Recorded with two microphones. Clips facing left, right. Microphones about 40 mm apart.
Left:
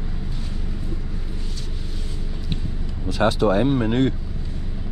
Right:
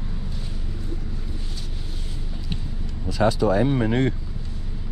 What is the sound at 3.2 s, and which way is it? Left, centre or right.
Speech, left.